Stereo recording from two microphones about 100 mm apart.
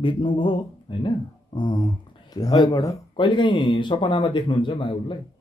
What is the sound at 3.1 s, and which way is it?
Speech, 50° left (ahead or behind).